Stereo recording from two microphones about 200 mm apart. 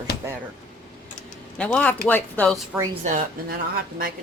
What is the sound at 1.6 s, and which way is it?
Speech, 5° left (ahead or behind).